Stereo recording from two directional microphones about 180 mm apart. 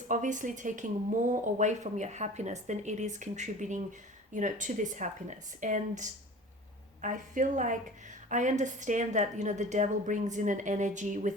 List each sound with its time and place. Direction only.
0.1 s a woman's voice: 45° right (ahead or behind)